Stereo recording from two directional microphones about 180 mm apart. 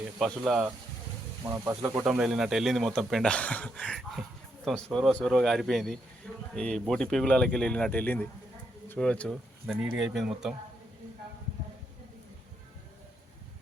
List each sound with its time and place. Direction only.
0.2 s speech: 5° right (ahead or behind)
1.5 s speech: 15° right (ahead or behind)
2.0 s speech: 5° right (ahead or behind)